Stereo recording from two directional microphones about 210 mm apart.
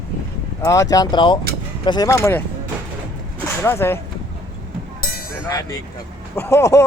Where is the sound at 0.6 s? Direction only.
15° left (ahead or behind).